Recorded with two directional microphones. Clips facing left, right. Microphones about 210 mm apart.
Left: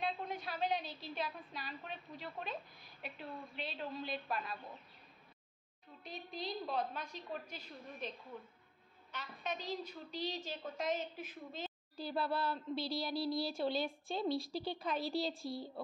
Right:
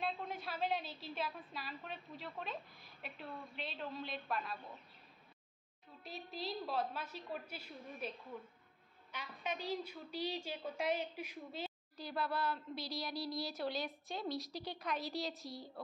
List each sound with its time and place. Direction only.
0.0 s a woman's voice: centre (ahead or behind)
6.0 s a woman's voice: 5° right (ahead or behind)
9.1 s a woman's voice: 10° right (ahead or behind)
12.0 s speech: 30° left (ahead or behind)